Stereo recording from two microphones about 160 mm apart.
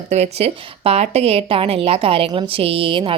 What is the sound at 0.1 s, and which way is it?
A woman's voice, 40° right (ahead or behind).